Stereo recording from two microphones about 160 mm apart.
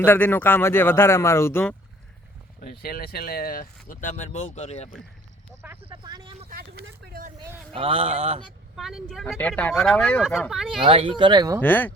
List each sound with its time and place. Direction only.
0.0 s speech: 10° left (ahead or behind)
2.6 s speech: 65° left (ahead or behind)
3.8 s speech: 50° left (ahead or behind)
5.8 s vehicle: 30° right (ahead or behind)
6.5 s vehicle: 70° right (ahead or behind)
7.3 s vehicle: 20° right (ahead or behind)
7.7 s speech: 35° right (ahead or behind)
8.7 s speech: centre (ahead or behind)
10.8 s speech: 35° right (ahead or behind)
11.6 s speech: 10° left (ahead or behind)